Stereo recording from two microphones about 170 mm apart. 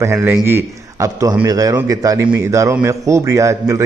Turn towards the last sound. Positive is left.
turn(degrees=-15)  # may be behind; listen again after turning